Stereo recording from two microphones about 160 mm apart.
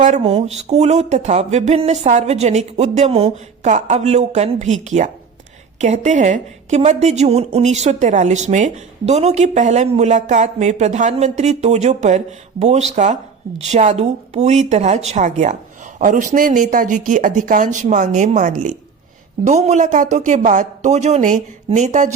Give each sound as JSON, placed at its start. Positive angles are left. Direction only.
{"t": 0.0, "sound": "a woman's voice", "side_deg": -40}